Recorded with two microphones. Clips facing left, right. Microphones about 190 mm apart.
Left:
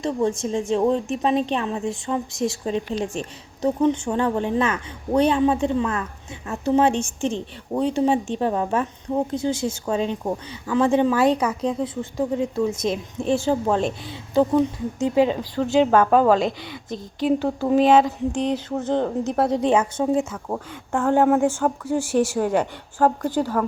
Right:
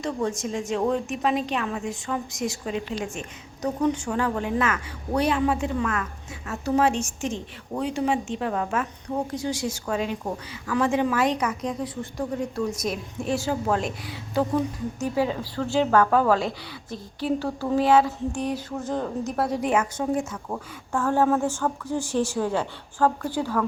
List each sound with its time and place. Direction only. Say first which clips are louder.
0.0 s a woman's voice: left 4 dB; 25° left (ahead or behind)